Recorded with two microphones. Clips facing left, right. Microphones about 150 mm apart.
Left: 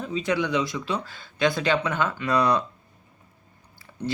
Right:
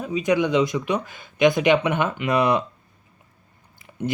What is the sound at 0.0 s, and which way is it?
Speech, 15° right (ahead or behind).